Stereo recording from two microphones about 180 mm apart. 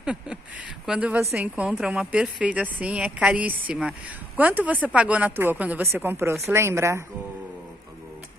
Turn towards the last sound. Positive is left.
turn(degrees=-15)  # may be behind; listen again after turning